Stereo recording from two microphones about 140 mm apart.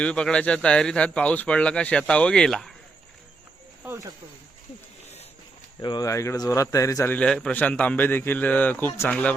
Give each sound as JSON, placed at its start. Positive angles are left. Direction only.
{"t": 0.0, "sound": "a man's voice", "side_deg": 5}
{"t": 3.8, "sound": "speech", "side_deg": -20}
{"t": 5.8, "sound": "a man's voice", "side_deg": 30}